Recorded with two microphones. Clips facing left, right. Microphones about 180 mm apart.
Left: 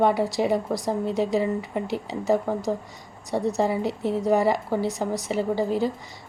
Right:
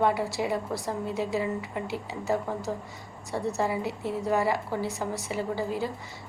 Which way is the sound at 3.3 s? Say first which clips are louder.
Left 5 dB; 15° left (ahead or behind).